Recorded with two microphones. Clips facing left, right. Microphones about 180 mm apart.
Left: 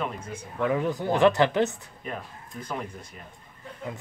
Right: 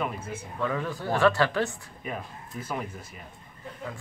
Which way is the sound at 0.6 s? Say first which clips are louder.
Left 5 dB; 20° left (ahead or behind).